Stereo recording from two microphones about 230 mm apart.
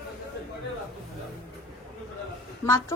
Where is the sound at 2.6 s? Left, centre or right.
Centre.